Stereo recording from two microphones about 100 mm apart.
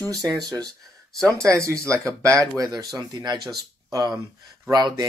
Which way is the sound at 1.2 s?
30° right (ahead or behind).